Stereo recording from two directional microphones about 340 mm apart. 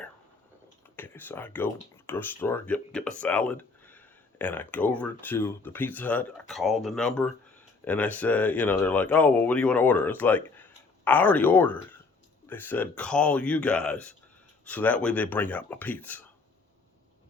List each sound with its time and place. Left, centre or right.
0.9 s speech: centre